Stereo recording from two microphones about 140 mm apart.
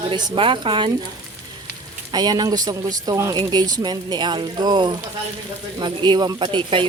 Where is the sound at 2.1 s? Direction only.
30° right (ahead or behind).